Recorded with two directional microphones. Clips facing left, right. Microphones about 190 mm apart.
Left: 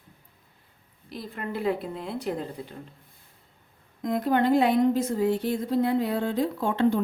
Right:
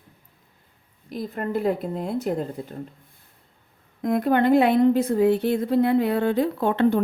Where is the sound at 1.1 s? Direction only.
45° right (ahead or behind).